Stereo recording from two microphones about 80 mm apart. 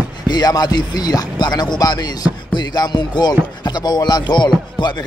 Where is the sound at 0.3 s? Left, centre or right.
Left.